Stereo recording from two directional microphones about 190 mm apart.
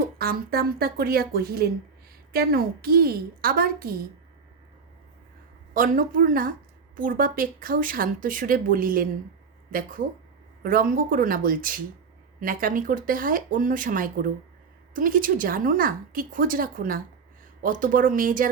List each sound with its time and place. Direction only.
0.2 s speech: 55° right (ahead or behind)
5.7 s speech: 45° right (ahead or behind)